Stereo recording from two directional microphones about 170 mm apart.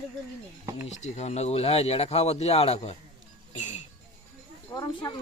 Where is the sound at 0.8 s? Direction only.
40° left (ahead or behind).